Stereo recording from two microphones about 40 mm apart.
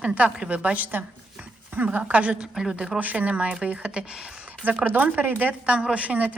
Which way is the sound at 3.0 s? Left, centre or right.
Right.